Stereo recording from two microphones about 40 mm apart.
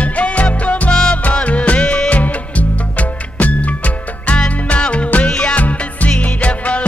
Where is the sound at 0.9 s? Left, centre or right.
Left.